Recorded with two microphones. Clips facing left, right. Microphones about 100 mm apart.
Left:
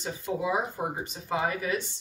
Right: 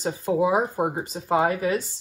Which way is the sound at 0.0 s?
40° right (ahead or behind).